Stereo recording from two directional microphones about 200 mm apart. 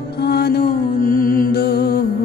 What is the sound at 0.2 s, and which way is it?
Music, 55° left (ahead or behind).